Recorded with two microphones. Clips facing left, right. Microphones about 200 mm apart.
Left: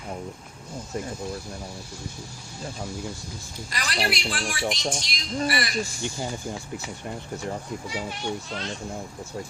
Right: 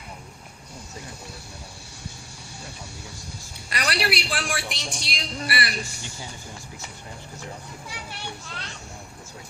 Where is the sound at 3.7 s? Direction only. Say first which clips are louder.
Right 2 dB; 70° right (ahead or behind).